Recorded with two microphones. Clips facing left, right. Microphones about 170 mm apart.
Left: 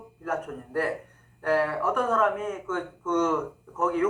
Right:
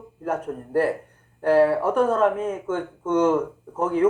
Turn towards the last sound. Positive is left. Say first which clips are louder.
# right 3 dB
turn(degrees=-30)  # may be behind; listen again after turning